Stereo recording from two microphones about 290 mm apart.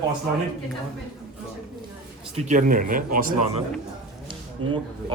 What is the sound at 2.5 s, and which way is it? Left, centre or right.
Speech, right.